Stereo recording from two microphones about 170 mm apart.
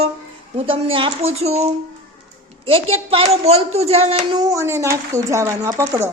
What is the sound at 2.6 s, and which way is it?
Speech, 35° right (ahead or behind).